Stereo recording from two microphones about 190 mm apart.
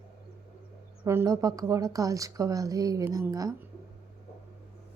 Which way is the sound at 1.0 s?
10° right (ahead or behind).